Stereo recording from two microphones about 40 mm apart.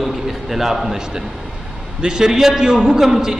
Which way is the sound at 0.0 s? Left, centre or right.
Centre.